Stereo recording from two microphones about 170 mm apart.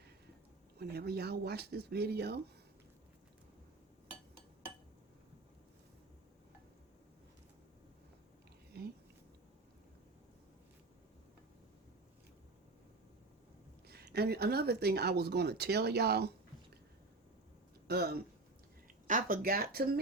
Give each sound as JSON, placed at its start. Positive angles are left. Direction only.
{"t": 0.8, "sound": "speech", "side_deg": -70}
{"t": 8.7, "sound": "a sound", "side_deg": -70}
{"t": 13.8, "sound": "speech", "side_deg": -70}
{"t": 17.8, "sound": "speech", "side_deg": -70}
{"t": 19.0, "sound": "speech", "side_deg": -55}